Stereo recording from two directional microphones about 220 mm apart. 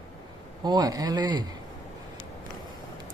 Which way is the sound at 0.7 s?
15° right (ahead or behind).